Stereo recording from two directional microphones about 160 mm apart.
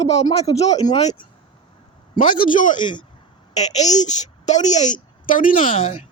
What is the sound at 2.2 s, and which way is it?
Speech, 55° left (ahead or behind).